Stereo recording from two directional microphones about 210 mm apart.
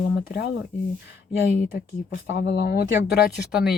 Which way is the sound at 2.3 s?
50° left (ahead or behind).